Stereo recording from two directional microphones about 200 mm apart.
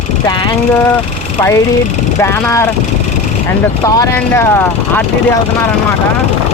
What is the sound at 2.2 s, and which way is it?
Speech, 15° left (ahead or behind).